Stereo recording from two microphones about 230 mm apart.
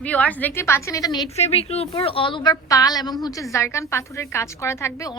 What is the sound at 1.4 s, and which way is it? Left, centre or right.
A woman's voice, left.